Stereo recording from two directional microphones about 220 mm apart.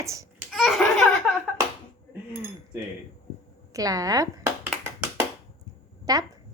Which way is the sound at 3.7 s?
15° right (ahead or behind).